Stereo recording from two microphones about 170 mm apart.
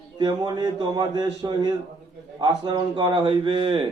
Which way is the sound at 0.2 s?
25° right (ahead or behind).